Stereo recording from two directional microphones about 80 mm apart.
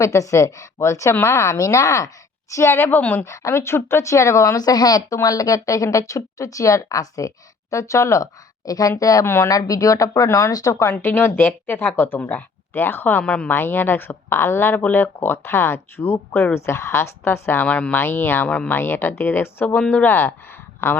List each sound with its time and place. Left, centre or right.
0.0 s a woman's voice: left
3.2 s speech: left
9.2 s a woman's voice: left
9.5 s speech: left
13.2 s speech: centre
13.5 s a woman's voice: left
17.7 s speech: centre
18.0 s speech: left
18.4 s speech: centre
18.7 s speech: left